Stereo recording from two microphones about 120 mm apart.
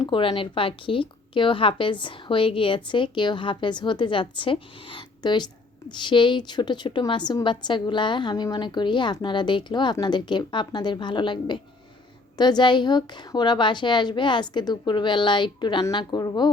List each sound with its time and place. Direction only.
0.0 s a woman's voice: 45° left (ahead or behind)